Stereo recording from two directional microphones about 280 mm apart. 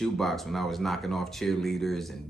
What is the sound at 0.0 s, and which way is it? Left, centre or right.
Speech, centre.